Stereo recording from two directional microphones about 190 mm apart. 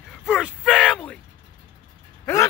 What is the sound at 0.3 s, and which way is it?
Groan, 5° right (ahead or behind).